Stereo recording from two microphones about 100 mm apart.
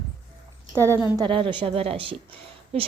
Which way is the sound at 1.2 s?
55° right (ahead or behind).